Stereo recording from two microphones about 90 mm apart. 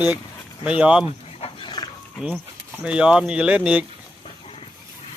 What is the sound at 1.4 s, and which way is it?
Dog, 60° left (ahead or behind).